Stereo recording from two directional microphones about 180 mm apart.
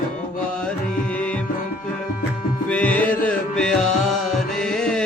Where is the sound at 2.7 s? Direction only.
5° left (ahead or behind).